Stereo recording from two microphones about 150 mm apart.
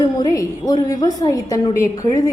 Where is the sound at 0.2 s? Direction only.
25° left (ahead or behind).